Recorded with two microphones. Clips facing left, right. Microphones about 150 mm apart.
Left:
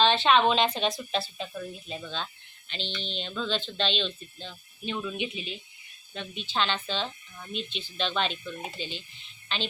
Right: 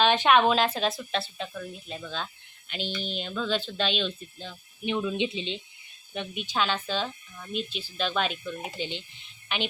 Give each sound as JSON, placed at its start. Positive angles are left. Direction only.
{"t": 0.0, "sound": "speech", "side_deg": -10}
{"t": 2.0, "sound": "speech", "side_deg": -5}
{"t": 4.9, "sound": "speech", "side_deg": -20}
{"t": 6.1, "sound": "speech", "side_deg": -15}